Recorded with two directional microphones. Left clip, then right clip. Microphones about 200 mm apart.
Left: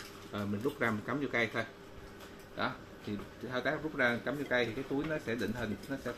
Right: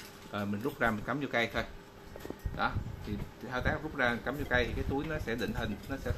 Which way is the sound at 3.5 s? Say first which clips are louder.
Even; 25° right (ahead or behind).